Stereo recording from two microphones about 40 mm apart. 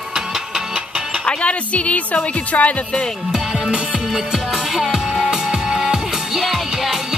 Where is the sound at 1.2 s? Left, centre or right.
Left.